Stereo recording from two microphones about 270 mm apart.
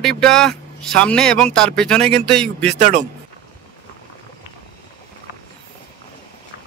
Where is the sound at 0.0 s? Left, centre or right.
Centre.